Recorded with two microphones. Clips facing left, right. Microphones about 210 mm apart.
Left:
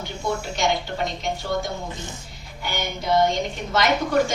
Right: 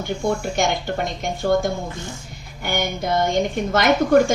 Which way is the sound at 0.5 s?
50° right (ahead or behind).